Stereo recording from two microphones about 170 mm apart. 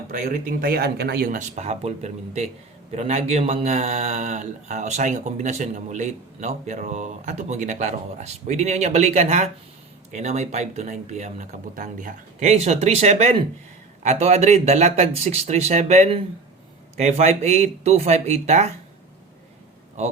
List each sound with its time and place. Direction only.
0.1 s speech: 55° right (ahead or behind)